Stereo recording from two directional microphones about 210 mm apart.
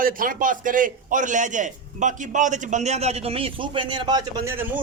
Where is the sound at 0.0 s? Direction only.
40° right (ahead or behind).